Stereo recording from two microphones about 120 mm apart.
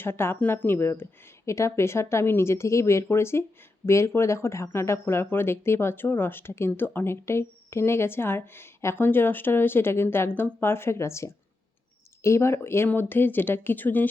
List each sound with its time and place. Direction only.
0.0 s speech: 20° left (ahead or behind)